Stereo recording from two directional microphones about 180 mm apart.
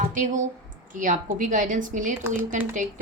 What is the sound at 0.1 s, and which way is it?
A woman's voice, 45° right (ahead or behind).